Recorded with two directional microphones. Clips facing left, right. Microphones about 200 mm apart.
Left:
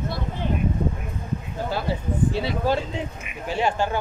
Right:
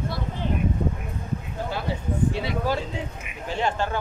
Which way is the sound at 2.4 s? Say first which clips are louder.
Left 3 dB; 30° left (ahead or behind).